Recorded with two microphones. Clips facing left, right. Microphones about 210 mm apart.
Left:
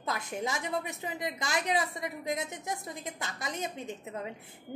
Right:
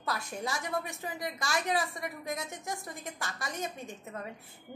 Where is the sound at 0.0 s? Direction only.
20° left (ahead or behind).